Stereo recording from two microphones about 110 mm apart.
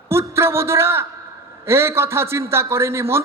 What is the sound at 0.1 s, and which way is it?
A man's voice, 25° right (ahead or behind).